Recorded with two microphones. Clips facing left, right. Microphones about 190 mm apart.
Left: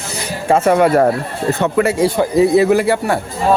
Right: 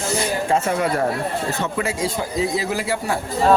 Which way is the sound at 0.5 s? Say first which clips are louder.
Left 10 dB; 70° left (ahead or behind).